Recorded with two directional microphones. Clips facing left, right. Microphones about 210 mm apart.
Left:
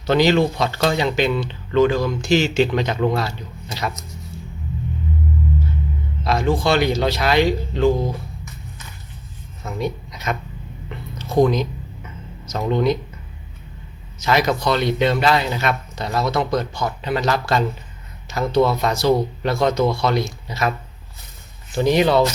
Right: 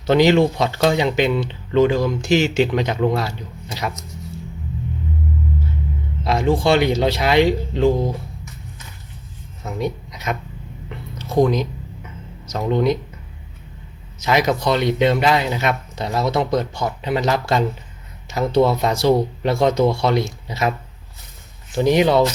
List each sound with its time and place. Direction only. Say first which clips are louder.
0.0 s speech: right 2 dB; 20° right (ahead or behind)
6.2 s speech: right 2 dB; 25° right (ahead or behind)
9.6 s speech: right 1 dB; 15° right (ahead or behind)
14.3 s speech: right 1 dB; 15° right (ahead or behind)
21.8 s speech: right 1 dB; 15° right (ahead or behind)